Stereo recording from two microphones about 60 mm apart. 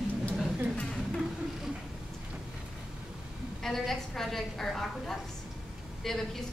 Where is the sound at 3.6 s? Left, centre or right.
Centre.